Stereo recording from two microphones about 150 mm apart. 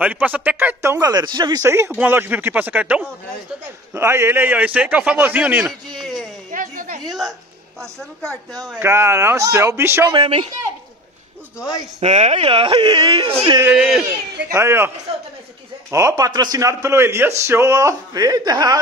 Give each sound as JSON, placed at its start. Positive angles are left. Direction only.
{"t": 0.0, "sound": "speech", "side_deg": -10}
{"t": 5.9, "sound": "a sound", "side_deg": 0}
{"t": 6.5, "sound": "a sound", "side_deg": -65}
{"t": 8.8, "sound": "speech", "side_deg": -15}
{"t": 10.1, "sound": "speech", "side_deg": -35}
{"t": 12.0, "sound": "speech", "side_deg": -50}
{"t": 13.6, "sound": "speech", "side_deg": -10}
{"t": 15.9, "sound": "speech", "side_deg": -20}